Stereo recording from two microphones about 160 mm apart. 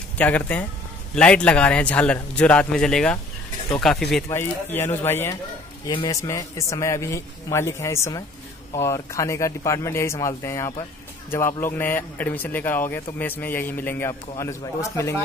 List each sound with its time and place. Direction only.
0.2 s a man's voice: 10° left (ahead or behind)
4.3 s a man's voice: 15° left (ahead or behind)
5.9 s a man's voice: 25° left (ahead or behind)